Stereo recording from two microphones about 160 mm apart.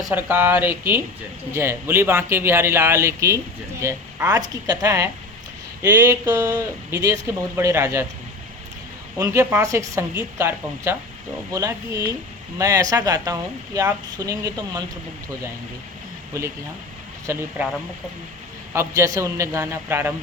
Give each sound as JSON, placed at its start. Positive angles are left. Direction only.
{"t": 0.1, "sound": "speech", "side_deg": -10}
{"t": 9.1, "sound": "speech", "side_deg": -20}
{"t": 17.3, "sound": "speech", "side_deg": -15}
{"t": 18.7, "sound": "speech", "side_deg": -15}